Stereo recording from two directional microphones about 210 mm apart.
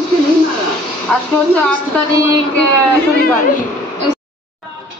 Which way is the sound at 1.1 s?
5° left (ahead or behind).